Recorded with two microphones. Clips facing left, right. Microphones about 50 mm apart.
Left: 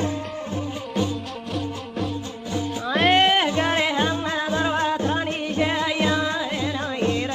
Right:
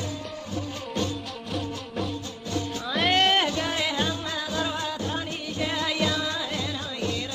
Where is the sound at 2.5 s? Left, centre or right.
Centre.